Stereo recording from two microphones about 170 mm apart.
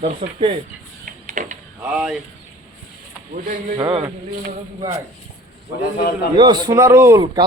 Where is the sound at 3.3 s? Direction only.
50° right (ahead or behind).